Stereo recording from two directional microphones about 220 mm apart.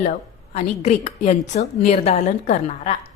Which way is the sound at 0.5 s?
30° left (ahead or behind).